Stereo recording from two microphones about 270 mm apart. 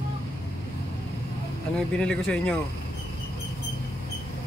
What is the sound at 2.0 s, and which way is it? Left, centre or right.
Speech, centre.